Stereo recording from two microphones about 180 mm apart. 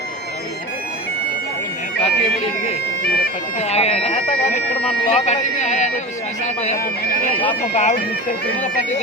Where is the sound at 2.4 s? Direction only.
35° left (ahead or behind).